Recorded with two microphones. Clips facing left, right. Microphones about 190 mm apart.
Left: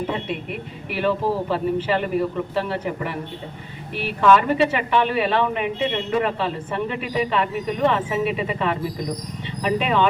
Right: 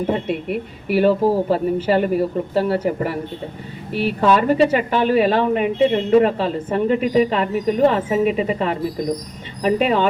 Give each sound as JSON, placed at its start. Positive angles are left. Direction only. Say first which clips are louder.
{"t": 0.9, "sound": "speech", "louder": "right 6 dB", "side_deg": -40}